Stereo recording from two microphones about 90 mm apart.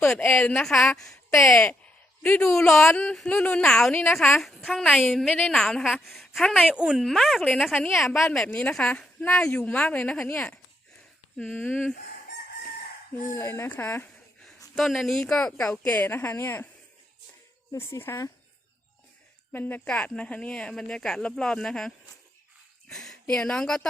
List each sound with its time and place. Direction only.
0.2 s speech: 20° left (ahead or behind); by 1.5 s 5° left (ahead or behind)
1.5 s a sound: 15° left (ahead or behind)
2.5 s speech: 5° left (ahead or behind)
5.3 s speech: 10° left (ahead or behind); by 7.0 s 10° right (ahead or behind)
7.0 s speech: centre (ahead or behind)
13.3 s speech: 30° left (ahead or behind)
13.7 s a woman's voice: 20° left (ahead or behind)
14.8 s speech: centre (ahead or behind)
15.9 s a woman's voice: 20° left (ahead or behind)
17.7 s speech: 35° left (ahead or behind)
19.5 s a woman's voice: 20° left (ahead or behind)